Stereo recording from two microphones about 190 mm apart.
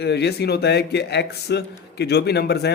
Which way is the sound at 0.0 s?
60° left (ahead or behind).